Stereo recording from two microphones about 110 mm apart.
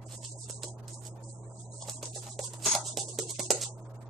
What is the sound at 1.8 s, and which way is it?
Music, centre (ahead or behind).